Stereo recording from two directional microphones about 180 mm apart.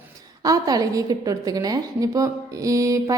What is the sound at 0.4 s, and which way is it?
A woman's voice, 20° right (ahead or behind).